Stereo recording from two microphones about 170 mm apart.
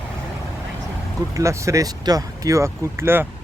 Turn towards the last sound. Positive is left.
turn(degrees=-15)  # may be behind; listen again after turning